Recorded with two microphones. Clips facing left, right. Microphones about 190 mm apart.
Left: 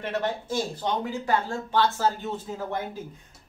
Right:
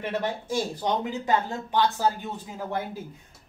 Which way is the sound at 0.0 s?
10° right (ahead or behind).